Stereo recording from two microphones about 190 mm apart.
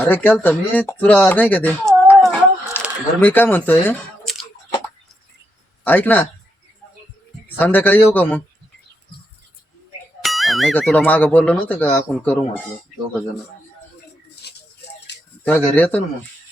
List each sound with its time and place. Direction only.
0.1 s speech: 10° left (ahead or behind)
2.8 s a sound: 10° left (ahead or behind)
3.2 s speech: 10° left (ahead or behind)
5.8 s speech: 10° left (ahead or behind)
7.4 s speech: 10° left (ahead or behind)
10.2 s speech: centre (ahead or behind)
14.4 s music: 60° left (ahead or behind)
15.1 s a sound: 65° left (ahead or behind)
15.4 s speech: 10° left (ahead or behind)